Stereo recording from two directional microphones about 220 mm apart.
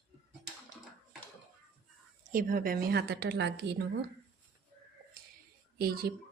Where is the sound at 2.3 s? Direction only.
40° right (ahead or behind).